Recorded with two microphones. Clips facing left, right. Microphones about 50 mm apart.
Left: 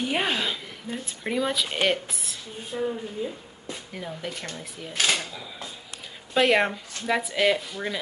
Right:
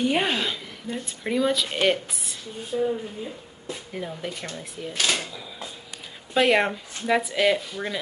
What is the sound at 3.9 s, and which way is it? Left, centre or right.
Speech, centre.